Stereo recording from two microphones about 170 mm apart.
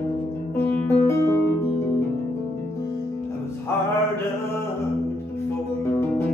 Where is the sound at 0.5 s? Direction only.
10° left (ahead or behind).